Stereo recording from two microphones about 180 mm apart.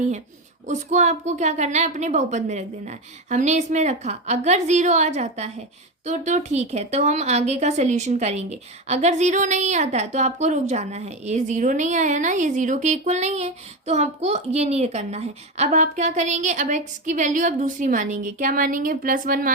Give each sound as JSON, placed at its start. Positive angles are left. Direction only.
{"t": 0.7, "sound": "speech", "side_deg": -40}